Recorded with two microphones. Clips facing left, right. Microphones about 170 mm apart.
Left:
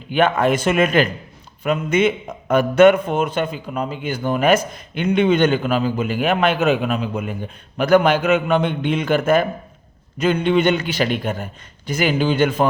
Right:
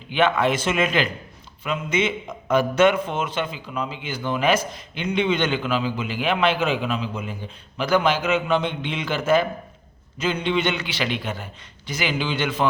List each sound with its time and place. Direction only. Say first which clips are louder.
0.1 s a man's voice: left 3 dB; 50° left (ahead or behind)